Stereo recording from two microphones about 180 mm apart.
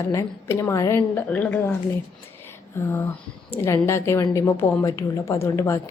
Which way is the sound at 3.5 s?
15° left (ahead or behind).